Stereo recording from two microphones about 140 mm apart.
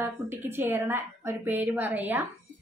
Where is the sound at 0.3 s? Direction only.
15° right (ahead or behind).